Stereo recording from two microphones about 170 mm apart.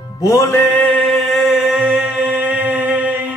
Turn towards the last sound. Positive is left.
turn(degrees=-10)  # may be behind; listen again after turning